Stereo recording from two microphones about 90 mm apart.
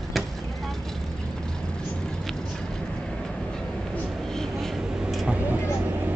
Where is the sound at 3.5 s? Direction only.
5° left (ahead or behind).